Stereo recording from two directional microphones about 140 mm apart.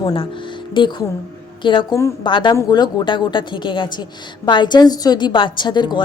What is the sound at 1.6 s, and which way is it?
A woman's voice, 35° left (ahead or behind).